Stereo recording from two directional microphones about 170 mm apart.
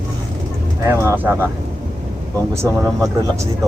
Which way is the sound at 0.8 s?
15° right (ahead or behind).